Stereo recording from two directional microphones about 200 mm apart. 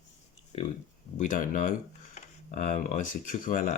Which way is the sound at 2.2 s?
35° left (ahead or behind).